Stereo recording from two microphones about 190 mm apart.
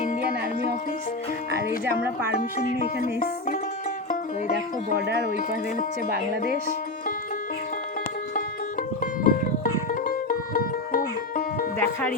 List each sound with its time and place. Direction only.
2.4 s music: 45° left (ahead or behind)
9.0 s music: 45° left (ahead or behind)
11.8 s music: 10° left (ahead or behind)